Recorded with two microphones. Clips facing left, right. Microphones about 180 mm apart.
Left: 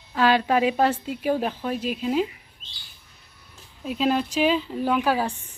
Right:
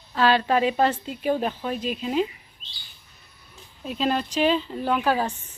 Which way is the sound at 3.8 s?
5° left (ahead or behind).